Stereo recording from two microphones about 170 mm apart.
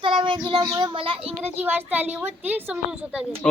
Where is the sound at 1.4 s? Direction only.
10° right (ahead or behind).